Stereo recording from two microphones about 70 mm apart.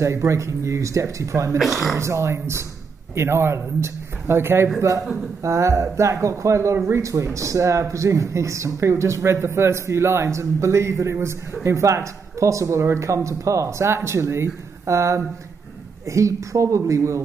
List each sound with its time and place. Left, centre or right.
0.0 s speech: right
1.6 s speech: centre
2.0 s speech: right